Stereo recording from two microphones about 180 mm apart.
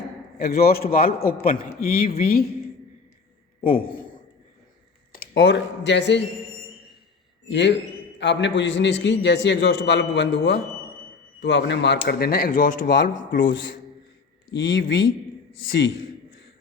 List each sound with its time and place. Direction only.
0.3 s a man's voice: 60° left (ahead or behind)
3.6 s a man's voice: 55° left (ahead or behind)
5.1 s speech: 80° left
7.4 s a man's voice: 75° left (ahead or behind)
12.0 s speech: 60° left (ahead or behind)
14.5 s a man's voice: 75° left (ahead or behind)